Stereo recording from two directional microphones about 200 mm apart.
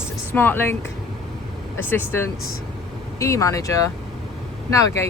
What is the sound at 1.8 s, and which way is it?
Speech, 10° left (ahead or behind).